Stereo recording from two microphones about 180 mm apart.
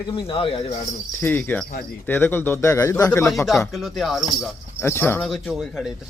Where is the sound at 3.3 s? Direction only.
Centre (ahead or behind).